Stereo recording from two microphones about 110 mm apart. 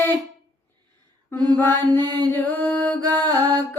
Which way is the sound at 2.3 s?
20° left (ahead or behind).